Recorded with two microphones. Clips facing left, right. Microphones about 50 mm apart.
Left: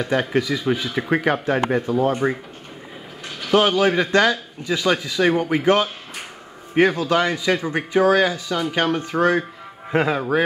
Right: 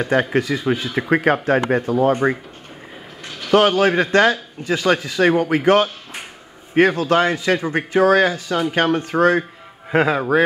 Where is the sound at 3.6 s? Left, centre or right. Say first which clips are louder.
Right 2 dB; right.